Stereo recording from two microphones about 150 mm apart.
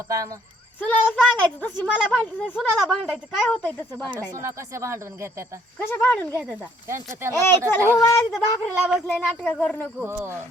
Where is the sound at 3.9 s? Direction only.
20° right (ahead or behind).